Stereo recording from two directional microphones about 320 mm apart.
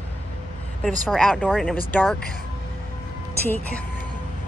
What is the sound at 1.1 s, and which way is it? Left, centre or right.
Speech, centre.